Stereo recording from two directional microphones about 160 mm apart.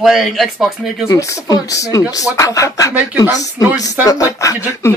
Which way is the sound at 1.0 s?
20° left (ahead or behind).